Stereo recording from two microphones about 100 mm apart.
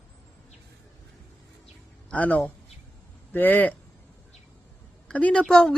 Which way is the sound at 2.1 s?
15° left (ahead or behind).